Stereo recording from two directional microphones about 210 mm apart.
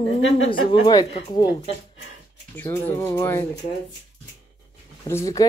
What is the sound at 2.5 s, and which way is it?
Speech, 10° left (ahead or behind).